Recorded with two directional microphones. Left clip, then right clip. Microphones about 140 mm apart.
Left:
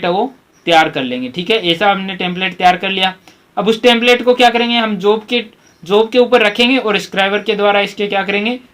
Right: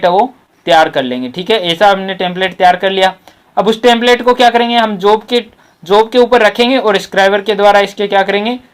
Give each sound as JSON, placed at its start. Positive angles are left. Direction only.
{"t": 0.6, "sound": "speech", "side_deg": -35}
{"t": 5.9, "sound": "speech", "side_deg": -35}